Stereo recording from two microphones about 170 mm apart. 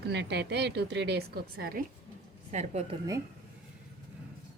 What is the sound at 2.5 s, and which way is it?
Speech, 40° right (ahead or behind).